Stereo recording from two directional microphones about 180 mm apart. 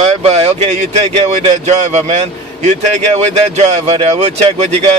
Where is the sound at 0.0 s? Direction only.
35° right (ahead or behind).